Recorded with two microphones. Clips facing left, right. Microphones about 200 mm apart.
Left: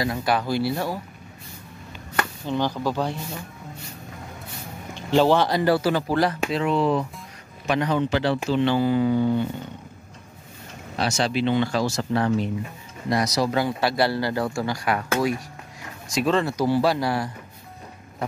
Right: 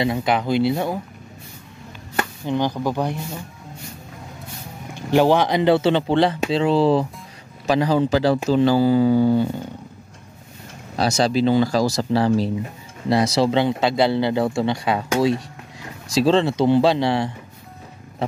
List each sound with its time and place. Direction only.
0.0 s speech: 20° right (ahead or behind)
2.1 s speech: 15° right (ahead or behind)
4.9 s speech: 15° right (ahead or behind); by 9.5 s 35° right (ahead or behind)
11.0 s speech: 40° right (ahead or behind)